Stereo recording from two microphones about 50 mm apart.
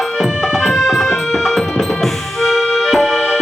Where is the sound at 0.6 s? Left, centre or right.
Centre.